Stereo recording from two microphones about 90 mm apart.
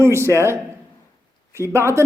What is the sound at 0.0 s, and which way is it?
A man's voice, 30° right (ahead or behind).